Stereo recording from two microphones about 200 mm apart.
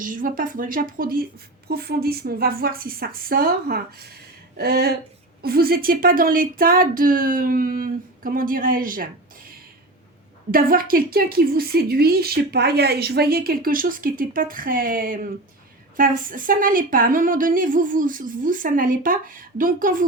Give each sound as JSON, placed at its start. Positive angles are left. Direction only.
{"t": 0.0, "sound": "a woman's voice", "side_deg": -40}
{"t": 10.5, "sound": "a woman's voice", "side_deg": -45}